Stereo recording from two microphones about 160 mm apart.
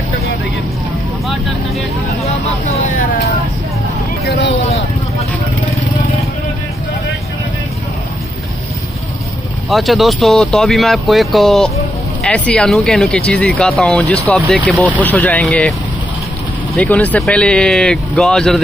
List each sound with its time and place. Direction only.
4.2 s speech: 90° left
9.7 s speech: centre (ahead or behind)
16.7 s speech: 10° left (ahead or behind)